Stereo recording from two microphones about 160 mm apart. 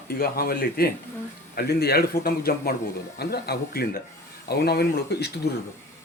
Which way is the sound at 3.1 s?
80° left.